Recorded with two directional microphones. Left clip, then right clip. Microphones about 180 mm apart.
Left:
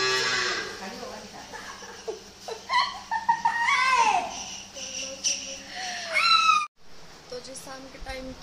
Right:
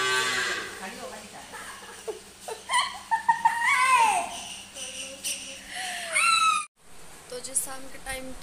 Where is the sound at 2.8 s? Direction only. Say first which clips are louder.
Left 2 dB; 45° right (ahead or behind).